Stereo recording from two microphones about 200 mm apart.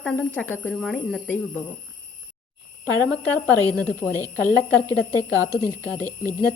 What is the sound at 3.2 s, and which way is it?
Speech, 5° left (ahead or behind).